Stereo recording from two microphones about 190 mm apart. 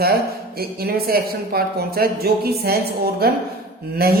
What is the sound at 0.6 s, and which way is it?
A woman's voice, 55° right (ahead or behind).